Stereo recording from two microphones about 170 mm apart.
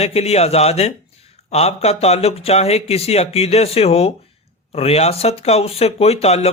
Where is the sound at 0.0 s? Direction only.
40° left (ahead or behind).